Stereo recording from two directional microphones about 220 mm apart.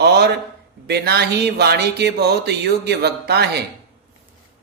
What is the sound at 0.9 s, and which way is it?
Speech, 50° right (ahead or behind).